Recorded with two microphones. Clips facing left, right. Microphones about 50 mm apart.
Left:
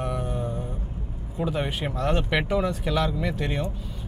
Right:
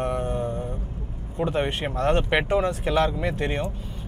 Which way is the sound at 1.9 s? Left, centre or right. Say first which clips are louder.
Right 3 dB; right.